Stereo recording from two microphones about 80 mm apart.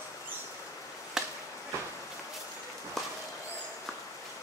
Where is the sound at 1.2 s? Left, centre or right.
Centre.